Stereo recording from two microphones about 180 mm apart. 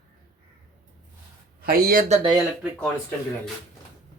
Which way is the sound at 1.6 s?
55° right (ahead or behind).